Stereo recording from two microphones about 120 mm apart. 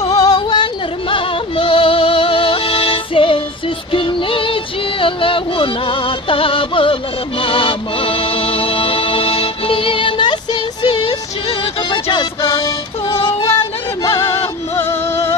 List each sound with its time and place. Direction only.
0.1 s music: 30° left (ahead or behind); by 13.7 s 50° left (ahead or behind)
14.0 s music: 25° left (ahead or behind)